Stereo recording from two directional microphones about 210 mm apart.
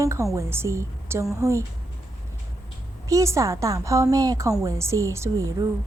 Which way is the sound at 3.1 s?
15° right (ahead or behind).